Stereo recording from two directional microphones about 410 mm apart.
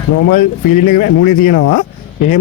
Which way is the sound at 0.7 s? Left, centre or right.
Left.